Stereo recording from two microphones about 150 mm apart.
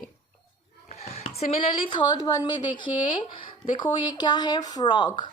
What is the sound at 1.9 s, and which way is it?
A woman's voice, 30° left (ahead or behind).